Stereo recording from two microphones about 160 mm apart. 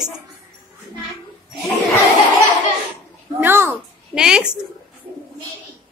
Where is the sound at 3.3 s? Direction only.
15° right (ahead or behind).